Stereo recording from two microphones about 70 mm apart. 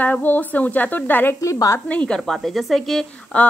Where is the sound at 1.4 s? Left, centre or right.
Left.